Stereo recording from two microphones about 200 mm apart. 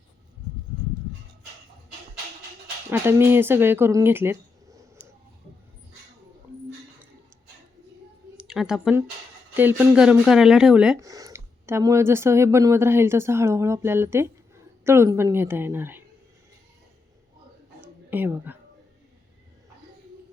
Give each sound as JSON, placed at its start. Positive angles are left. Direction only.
{"t": 2.9, "sound": "speech", "side_deg": -10}
{"t": 8.4, "sound": "speech", "side_deg": -5}
{"t": 11.0, "sound": "speech", "side_deg": -15}
{"t": 17.7, "sound": "a sound", "side_deg": -10}